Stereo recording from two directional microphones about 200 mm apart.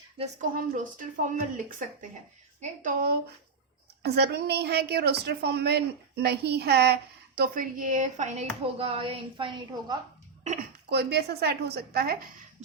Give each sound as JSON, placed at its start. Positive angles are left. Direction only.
{"t": 0.5, "sound": "speech", "side_deg": -40}
{"t": 2.6, "sound": "a woman's voice", "side_deg": -45}
{"t": 10.8, "sound": "a woman's voice", "side_deg": -55}